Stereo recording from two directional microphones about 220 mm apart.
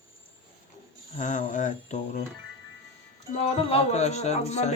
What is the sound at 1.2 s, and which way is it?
Speech, 35° left (ahead or behind).